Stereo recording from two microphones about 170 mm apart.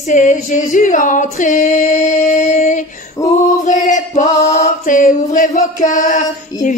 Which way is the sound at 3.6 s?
45° left (ahead or behind).